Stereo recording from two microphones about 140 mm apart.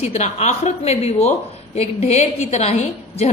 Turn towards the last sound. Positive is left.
turn(degrees=50)  # may be behind; listen again after turning